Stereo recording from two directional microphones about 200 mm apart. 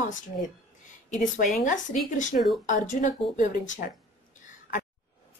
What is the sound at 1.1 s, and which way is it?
A woman's voice, 40° left (ahead or behind).